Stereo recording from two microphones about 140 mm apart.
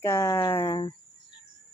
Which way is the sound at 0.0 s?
20° left (ahead or behind).